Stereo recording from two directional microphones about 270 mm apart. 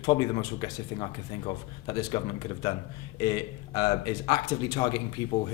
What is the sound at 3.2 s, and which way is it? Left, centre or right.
A man's voice, centre.